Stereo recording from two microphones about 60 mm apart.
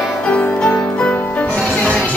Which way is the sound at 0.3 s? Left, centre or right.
Centre.